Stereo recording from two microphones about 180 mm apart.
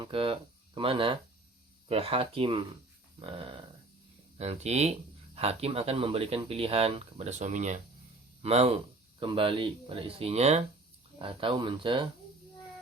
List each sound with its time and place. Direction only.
0.0 s speech: 30° right (ahead or behind)